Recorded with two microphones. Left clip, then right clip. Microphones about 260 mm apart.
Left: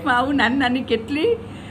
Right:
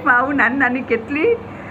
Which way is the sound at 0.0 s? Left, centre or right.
Centre.